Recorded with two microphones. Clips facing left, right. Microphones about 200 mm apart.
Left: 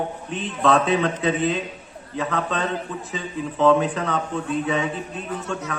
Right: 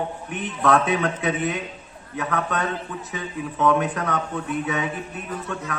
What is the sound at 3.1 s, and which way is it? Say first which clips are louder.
A man's voice: left 1 dB; 25° left (ahead or behind).